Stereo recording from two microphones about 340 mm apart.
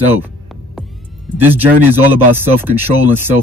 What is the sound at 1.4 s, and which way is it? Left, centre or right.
Speech, centre.